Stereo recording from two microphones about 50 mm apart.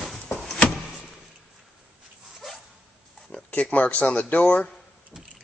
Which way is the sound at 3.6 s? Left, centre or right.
Left.